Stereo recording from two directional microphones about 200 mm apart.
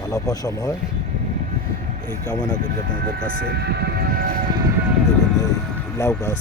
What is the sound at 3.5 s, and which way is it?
Vehicle, 55° right (ahead or behind).